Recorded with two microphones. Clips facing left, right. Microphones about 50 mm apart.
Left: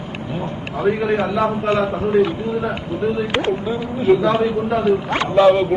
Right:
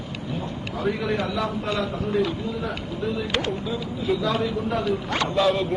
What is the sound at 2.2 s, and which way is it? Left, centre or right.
A man's voice, left.